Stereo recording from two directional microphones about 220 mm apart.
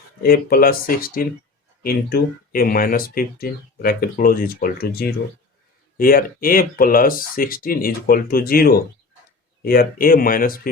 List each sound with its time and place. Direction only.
0.2 s speech: 40° left (ahead or behind)